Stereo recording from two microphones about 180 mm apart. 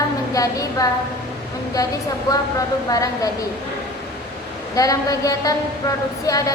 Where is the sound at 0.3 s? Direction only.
20° left (ahead or behind).